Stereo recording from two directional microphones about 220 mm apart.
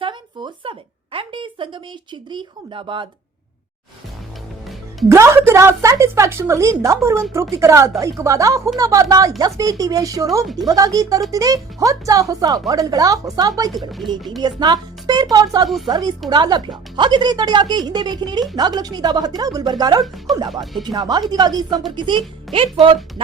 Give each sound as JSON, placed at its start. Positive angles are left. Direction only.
{"t": 0.0, "sound": "a sound", "side_deg": -20}
{"t": 2.3, "sound": "speech", "side_deg": -20}
{"t": 5.0, "sound": "a woman's voice", "side_deg": -10}
{"t": 10.4, "sound": "speech", "side_deg": 0}
{"t": 10.7, "sound": "a woman's voice", "side_deg": -15}
{"t": 13.7, "sound": "speech", "side_deg": 0}
{"t": 14.4, "sound": "a woman's voice", "side_deg": -20}
{"t": 20.5, "sound": "speech", "side_deg": 0}
{"t": 20.8, "sound": "speech", "side_deg": -20}